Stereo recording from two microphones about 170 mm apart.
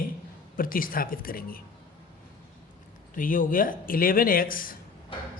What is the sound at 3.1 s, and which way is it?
A man's voice, 55° left (ahead or behind).